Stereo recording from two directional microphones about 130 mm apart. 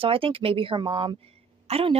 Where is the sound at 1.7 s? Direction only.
50° right (ahead or behind).